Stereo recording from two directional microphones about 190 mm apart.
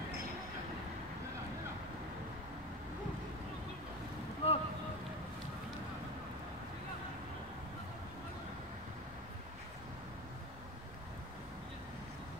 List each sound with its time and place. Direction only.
4.4 s boat: 30° left (ahead or behind)